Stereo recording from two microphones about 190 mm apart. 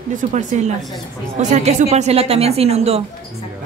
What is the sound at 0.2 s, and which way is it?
A woman's voice, 40° right (ahead or behind).